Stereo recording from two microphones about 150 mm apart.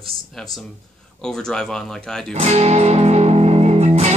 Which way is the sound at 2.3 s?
45° right (ahead or behind).